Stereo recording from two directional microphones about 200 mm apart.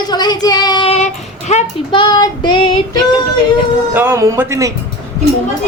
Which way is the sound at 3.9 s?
10° right (ahead or behind).